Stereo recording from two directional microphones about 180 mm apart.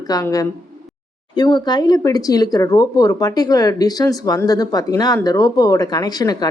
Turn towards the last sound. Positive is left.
turn(degrees=20)  # may be behind; listen again after turning